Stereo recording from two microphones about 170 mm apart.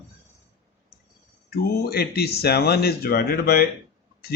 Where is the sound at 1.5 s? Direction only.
65° left (ahead or behind).